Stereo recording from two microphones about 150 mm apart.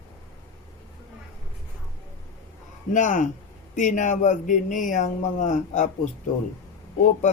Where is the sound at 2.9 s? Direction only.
60° left (ahead or behind).